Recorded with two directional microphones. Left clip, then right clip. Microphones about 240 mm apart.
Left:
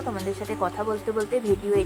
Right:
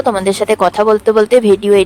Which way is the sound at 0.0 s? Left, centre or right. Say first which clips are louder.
Right 17 dB; right.